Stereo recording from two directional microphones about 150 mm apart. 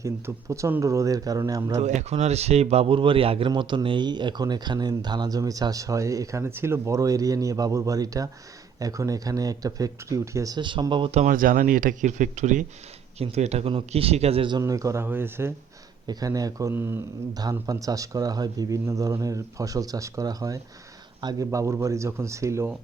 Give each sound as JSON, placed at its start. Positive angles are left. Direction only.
{"t": 0.0, "sound": "speech", "side_deg": -20}
{"t": 1.8, "sound": "speech", "side_deg": -50}
{"t": 11.1, "sound": "speech", "side_deg": -55}
{"t": 13.1, "sound": "speech", "side_deg": -45}
{"t": 14.6, "sound": "speech", "side_deg": -20}